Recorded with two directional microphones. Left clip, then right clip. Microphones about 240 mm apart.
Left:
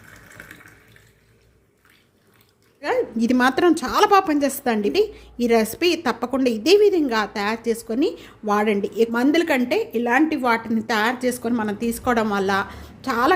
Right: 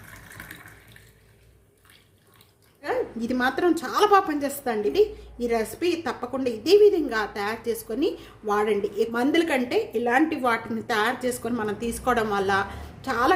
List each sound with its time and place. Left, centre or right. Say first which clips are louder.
0.1 s water: left 1 dB; centre
2.8 s a woman's voice: left 6 dB; left